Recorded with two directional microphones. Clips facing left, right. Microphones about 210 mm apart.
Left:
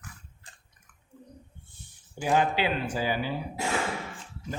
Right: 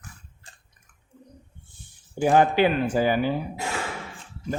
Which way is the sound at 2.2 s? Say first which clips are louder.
Right 7 dB; 50° right (ahead or behind).